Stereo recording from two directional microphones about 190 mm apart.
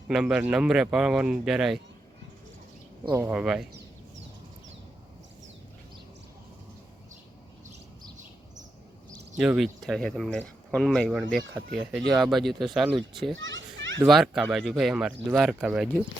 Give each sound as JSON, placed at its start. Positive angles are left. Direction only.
{"t": 0.1, "sound": "speech", "side_deg": -5}
{"t": 3.1, "sound": "speech", "side_deg": -15}
{"t": 9.4, "sound": "speech", "side_deg": -5}
{"t": 13.3, "sound": "children playing", "side_deg": -80}
{"t": 14.1, "sound": "speech", "side_deg": 0}